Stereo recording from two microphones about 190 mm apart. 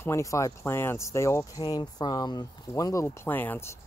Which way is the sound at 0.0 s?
15° left (ahead or behind).